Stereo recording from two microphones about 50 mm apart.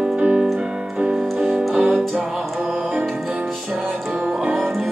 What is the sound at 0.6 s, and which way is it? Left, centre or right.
Keyboard, centre.